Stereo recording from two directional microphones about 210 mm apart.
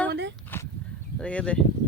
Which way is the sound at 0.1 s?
55° right (ahead or behind).